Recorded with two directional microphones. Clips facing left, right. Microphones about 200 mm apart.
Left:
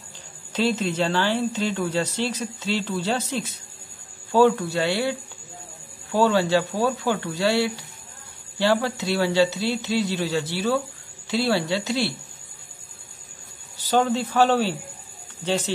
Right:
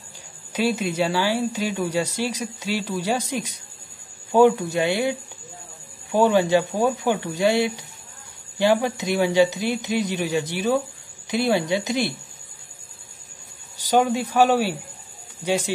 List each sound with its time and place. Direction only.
0.5 s speech: 10° right (ahead or behind)
6.1 s speech: 15° right (ahead or behind)
13.7 s speech: 15° right (ahead or behind)